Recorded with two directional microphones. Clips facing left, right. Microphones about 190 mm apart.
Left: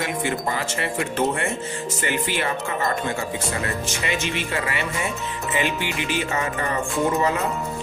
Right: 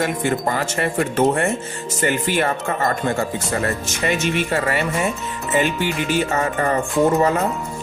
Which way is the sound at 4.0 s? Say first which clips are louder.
Right 8 dB; 45° right (ahead or behind).